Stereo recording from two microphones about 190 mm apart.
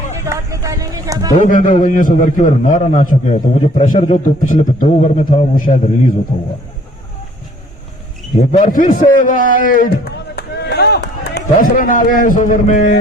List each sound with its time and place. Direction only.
0.3 s speech: 15° right (ahead or behind)
1.4 s a man's voice: 45° left (ahead or behind)
8.4 s a man's voice: 40° left (ahead or behind)